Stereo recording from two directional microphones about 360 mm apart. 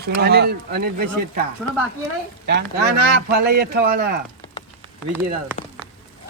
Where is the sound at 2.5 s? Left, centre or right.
Right.